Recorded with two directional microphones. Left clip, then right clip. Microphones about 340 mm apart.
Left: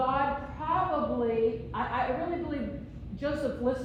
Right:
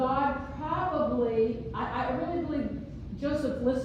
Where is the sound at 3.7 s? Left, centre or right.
Left.